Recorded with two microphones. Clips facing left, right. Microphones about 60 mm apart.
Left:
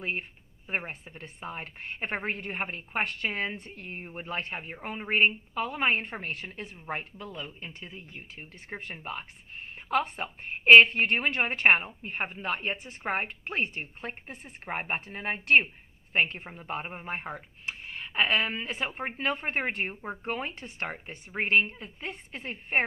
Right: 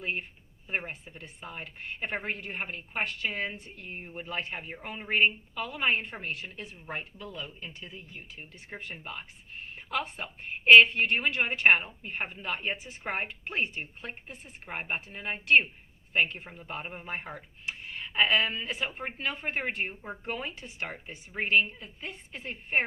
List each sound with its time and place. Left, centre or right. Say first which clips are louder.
0.0 s speech: left 1 dB; left
3.2 s speech: left 2 dB; left
6.8 s a woman's voice: left 3 dB; left
13.1 s a woman's voice: even; left